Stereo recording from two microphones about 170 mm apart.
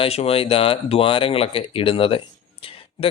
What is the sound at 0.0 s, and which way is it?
Speech, 35° left (ahead or behind).